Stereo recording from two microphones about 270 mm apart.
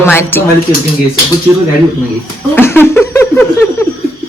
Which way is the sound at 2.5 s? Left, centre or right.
Centre.